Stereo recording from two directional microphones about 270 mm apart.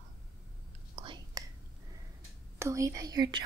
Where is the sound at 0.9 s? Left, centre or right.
Centre.